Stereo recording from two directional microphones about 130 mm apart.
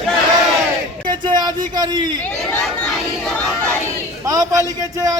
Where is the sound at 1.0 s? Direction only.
35° right (ahead or behind).